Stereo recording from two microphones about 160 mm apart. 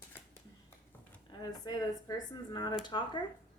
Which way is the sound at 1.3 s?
25° left (ahead or behind).